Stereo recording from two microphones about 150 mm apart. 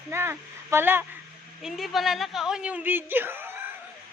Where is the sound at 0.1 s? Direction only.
15° right (ahead or behind).